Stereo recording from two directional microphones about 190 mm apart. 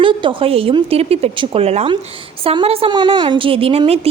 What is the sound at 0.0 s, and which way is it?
A woman's voice, 25° right (ahead or behind).